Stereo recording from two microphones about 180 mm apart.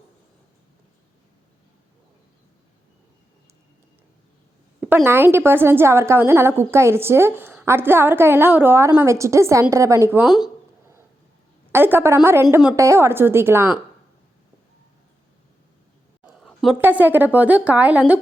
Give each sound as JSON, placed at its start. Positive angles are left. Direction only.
{"t": 5.0, "sound": "a woman's voice", "side_deg": -15}
{"t": 11.7, "sound": "a woman's voice", "side_deg": -10}
{"t": 16.2, "sound": "a sound", "side_deg": 0}
{"t": 16.7, "sound": "a woman's voice", "side_deg": -10}